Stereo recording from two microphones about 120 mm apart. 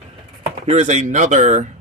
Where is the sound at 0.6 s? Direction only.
70° right (ahead or behind); by 1.7 s 85° right.